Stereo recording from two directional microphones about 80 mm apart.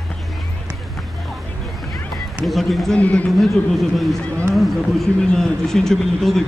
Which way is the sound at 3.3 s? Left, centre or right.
Centre.